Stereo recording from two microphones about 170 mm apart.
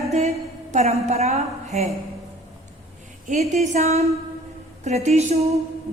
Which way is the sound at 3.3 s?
45° right (ahead or behind).